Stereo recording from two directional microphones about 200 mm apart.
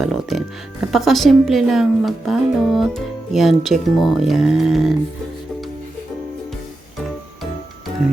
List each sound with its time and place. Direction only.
0.0 s speech: centre (ahead or behind)